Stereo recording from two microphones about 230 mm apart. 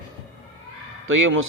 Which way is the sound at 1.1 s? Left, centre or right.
Right.